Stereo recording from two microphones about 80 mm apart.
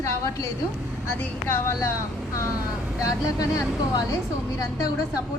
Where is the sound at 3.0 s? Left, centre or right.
Left.